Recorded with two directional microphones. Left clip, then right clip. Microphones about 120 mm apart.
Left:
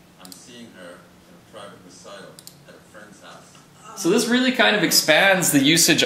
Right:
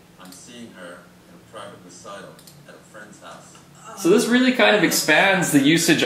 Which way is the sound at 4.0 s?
45° left (ahead or behind).